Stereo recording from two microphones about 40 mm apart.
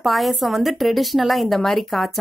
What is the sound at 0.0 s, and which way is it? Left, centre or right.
Speech, centre.